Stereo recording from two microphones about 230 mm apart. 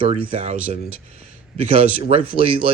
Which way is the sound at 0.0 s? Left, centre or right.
Right.